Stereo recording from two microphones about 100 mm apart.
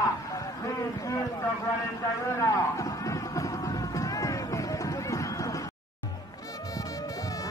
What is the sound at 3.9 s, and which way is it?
Music, 35° left (ahead or behind).